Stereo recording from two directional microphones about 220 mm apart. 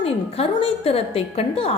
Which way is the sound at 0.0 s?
25° left (ahead or behind).